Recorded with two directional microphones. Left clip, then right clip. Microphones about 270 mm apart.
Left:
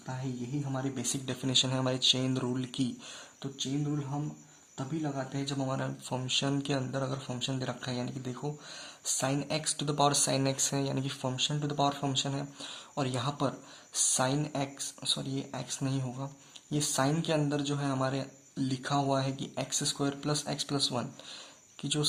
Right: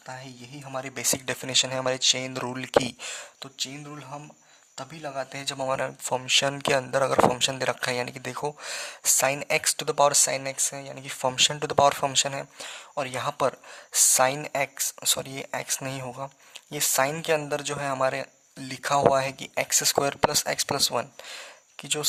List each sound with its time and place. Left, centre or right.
0.6 s speech: right